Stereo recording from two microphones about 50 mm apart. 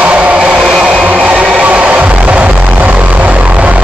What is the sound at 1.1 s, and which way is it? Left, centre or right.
Music, right.